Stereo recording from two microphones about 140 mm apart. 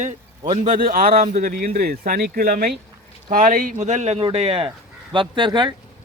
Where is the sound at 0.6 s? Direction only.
75° right (ahead or behind).